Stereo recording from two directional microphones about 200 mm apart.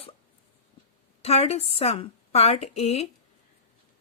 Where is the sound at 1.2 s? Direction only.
30° left (ahead or behind).